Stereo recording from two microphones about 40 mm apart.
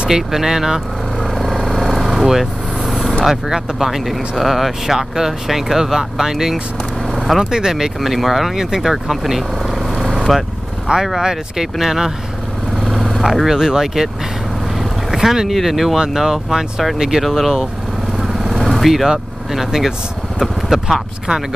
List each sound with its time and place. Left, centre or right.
0.1 s speech: centre
1.2 s vehicle: centre
2.0 s vehicle: centre
3.3 s speech: centre
7.1 s vehicle: centre
7.7 s speech: centre
8.8 s vehicle: centre
10.9 s speech: right
17.2 s speech: centre
18.2 s vehicle: centre
19.5 s speech: centre